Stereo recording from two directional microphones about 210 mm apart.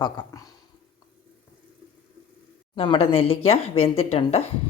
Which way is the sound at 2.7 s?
25° left (ahead or behind).